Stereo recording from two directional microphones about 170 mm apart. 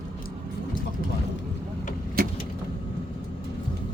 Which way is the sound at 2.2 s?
60° right (ahead or behind).